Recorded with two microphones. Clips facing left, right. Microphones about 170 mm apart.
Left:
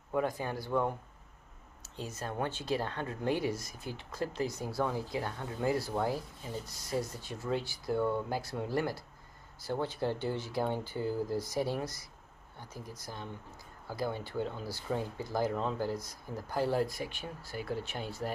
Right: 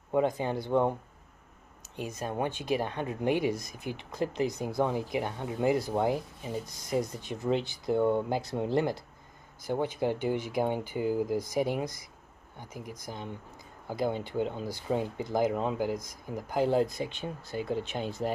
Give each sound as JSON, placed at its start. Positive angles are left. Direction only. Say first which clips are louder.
{"t": 0.1, "sound": "speech", "louder": "right 5 dB", "side_deg": -20}
{"t": 2.0, "sound": "speech", "louder": "right 4 dB", "side_deg": -15}
{"t": 13.0, "sound": "speech", "louder": "right 4 dB", "side_deg": -15}